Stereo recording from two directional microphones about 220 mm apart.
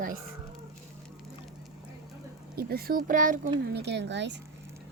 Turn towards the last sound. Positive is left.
turn(degrees=-55)  # may be behind; listen again after turning